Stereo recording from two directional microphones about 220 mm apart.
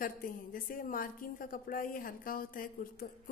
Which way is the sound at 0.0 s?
40° left (ahead or behind).